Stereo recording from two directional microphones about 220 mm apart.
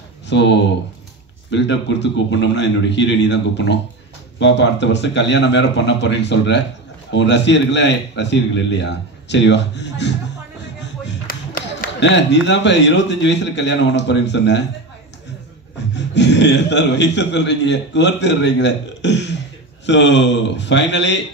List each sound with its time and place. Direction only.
0.3 s a man's voice: 55° left (ahead or behind)
10.8 s music: 55° left (ahead or behind)
12.0 s a man's voice: 55° left (ahead or behind)
15.9 s a man's voice: 50° left (ahead or behind)